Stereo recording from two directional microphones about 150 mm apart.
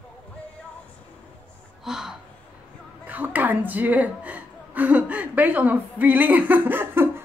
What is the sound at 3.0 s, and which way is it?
Gasp, 10° right (ahead or behind).